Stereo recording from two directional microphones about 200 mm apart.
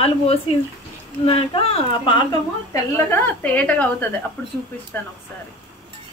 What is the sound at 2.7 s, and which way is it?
A woman's voice, 10° left (ahead or behind).